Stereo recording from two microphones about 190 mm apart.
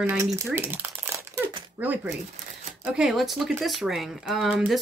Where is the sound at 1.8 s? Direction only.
10° right (ahead or behind).